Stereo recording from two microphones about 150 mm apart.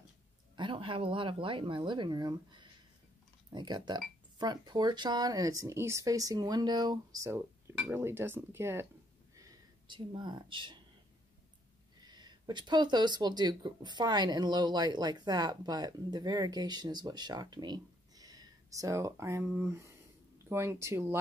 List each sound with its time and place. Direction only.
0.6 s speech: 35° right (ahead or behind); by 8.8 s 15° right (ahead or behind)
9.4 s speech: 30° right (ahead or behind)
12.0 s speech: 30° right (ahead or behind)